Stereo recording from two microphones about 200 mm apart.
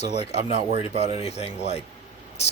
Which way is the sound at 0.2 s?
30° left (ahead or behind).